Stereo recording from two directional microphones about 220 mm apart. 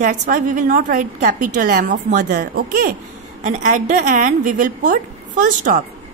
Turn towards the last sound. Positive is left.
turn(degrees=-35)  # may be behind; listen again after turning